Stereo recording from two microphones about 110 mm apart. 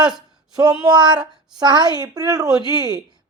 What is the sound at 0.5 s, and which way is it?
A woman's voice, 35° right (ahead or behind).